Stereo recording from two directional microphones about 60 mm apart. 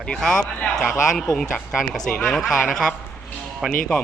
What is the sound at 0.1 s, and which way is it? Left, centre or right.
Speech, centre.